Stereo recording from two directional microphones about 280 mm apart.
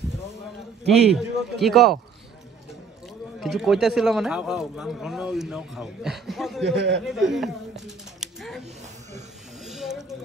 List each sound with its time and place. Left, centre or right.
1.1 s a man's voice: centre
3.3 s a man's voice: centre
6.6 s a man's voice: right
7.1 s speech: centre
9.7 s a sound: centre